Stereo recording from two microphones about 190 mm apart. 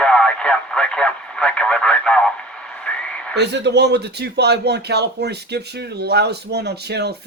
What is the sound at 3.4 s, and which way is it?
Speech, 65° right (ahead or behind).